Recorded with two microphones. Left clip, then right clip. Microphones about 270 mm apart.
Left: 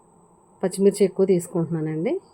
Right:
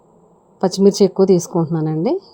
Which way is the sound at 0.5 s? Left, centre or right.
Right.